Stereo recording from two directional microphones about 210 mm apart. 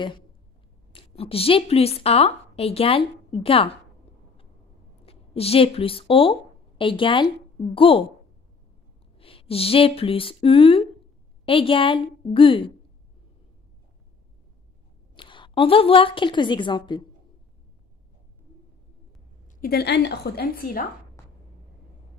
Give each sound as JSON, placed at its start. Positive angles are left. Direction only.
{"t": 0.9, "sound": "a woman's voice", "side_deg": 25}
{"t": 5.0, "sound": "a woman's voice", "side_deg": 25}
{"t": 9.2, "sound": "a woman's voice", "side_deg": 25}
{"t": 15.1, "sound": "a woman's voice", "side_deg": 25}
{"t": 19.6, "sound": "a woman's voice", "side_deg": 50}